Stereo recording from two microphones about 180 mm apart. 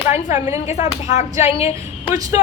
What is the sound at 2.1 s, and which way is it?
Speech, 20° right (ahead or behind).